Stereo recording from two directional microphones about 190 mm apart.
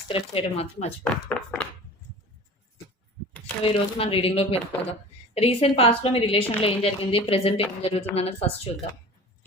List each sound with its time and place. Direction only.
0.1 s speech: 30° left (ahead or behind)
1.1 s speech: 5° left (ahead or behind)
3.6 s a woman's voice: 30° left (ahead or behind)